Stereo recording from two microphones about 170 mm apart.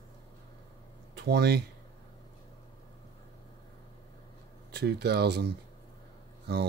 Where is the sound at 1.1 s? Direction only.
70° right (ahead or behind).